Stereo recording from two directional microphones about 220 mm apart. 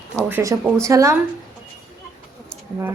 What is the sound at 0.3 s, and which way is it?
Speech, 10° right (ahead or behind).